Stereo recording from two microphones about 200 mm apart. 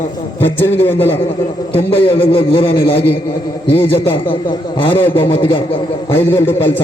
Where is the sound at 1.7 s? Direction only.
25° left (ahead or behind).